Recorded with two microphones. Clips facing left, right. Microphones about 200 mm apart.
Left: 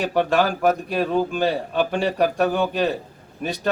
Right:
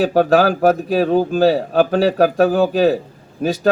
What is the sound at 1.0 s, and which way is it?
Speech, 35° right (ahead or behind).